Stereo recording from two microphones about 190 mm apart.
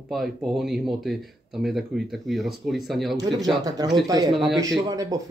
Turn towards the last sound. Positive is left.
turn(degrees=-20)  # may be behind; listen again after turning